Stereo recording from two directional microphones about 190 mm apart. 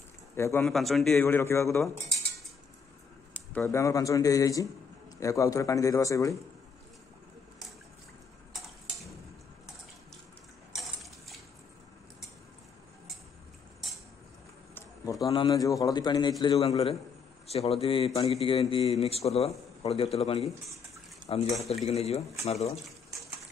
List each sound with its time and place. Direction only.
0.4 s speech: 15° left (ahead or behind)
0.7 s a man's voice: centre (ahead or behind)
1.2 s speech: 15° left (ahead or behind)
3.3 s speech: 10° left (ahead or behind)
10.7 s a sound: centre (ahead or behind)
14.7 s a sound: 10° left (ahead or behind)
15.2 s a man's voice: 20° left (ahead or behind)
16.5 s a man's voice: 30° left (ahead or behind)